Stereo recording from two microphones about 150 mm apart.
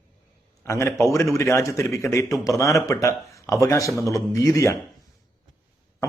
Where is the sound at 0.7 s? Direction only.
20° left (ahead or behind).